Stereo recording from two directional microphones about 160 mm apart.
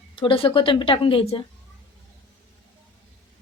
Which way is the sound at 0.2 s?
35° left (ahead or behind).